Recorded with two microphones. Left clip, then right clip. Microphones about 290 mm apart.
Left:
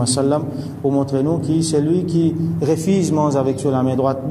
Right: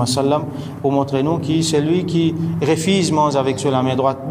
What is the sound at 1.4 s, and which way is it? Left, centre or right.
A man's voice, centre.